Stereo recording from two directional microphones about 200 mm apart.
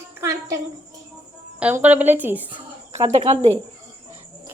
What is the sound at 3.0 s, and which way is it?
Speech, 30° right (ahead or behind).